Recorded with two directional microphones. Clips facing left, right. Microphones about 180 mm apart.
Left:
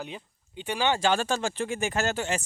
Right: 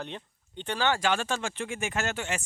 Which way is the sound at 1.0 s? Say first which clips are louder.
Left 3 dB; 35° left (ahead or behind).